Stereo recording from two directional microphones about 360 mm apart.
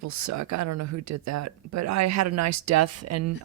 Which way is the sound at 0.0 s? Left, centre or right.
Right.